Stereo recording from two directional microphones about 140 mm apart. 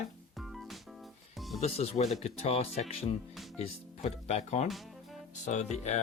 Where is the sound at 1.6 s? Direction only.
45° left (ahead or behind).